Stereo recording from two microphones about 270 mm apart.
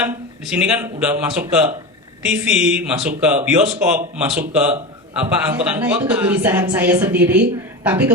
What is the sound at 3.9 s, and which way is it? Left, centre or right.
A woman's voice, centre.